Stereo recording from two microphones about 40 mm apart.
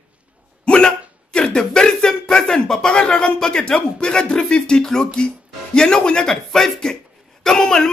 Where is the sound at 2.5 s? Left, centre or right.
Centre.